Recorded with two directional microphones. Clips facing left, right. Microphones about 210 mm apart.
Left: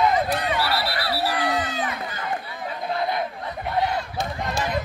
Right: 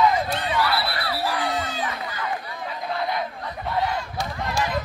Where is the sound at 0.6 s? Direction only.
35° left (ahead or behind).